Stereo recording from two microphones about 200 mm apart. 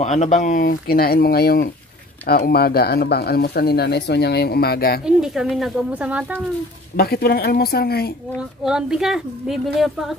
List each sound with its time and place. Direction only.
0.0 s speech: 35° left (ahead or behind)
5.0 s speech: 5° right (ahead or behind)
7.0 s speech: 50° left (ahead or behind)
8.4 s speech: 5° right (ahead or behind)